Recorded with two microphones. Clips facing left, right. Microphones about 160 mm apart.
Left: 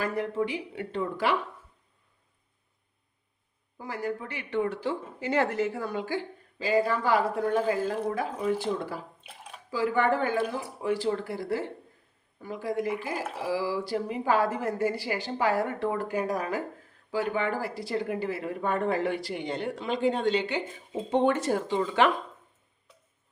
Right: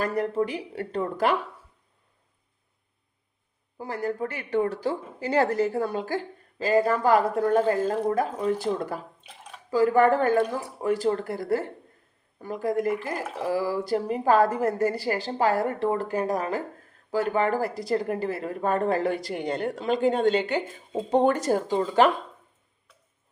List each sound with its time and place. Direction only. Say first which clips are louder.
0.0 s a woman's voice: right 3 dB; 40° right (ahead or behind)
3.8 s a woman's voice: right 4 dB; 35° right (ahead or behind)
13.1 s speech: right 2 dB; 5° left (ahead or behind)
13.5 s a woman's voice: right 4 dB; 50° right (ahead or behind); by 16.5 s 35° right (ahead or behind)
17.1 s a woman's voice: right 4 dB; 45° right (ahead or behind)